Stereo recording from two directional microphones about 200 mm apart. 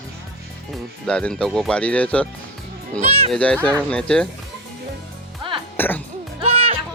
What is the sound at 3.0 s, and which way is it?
Speech, 30° right (ahead or behind).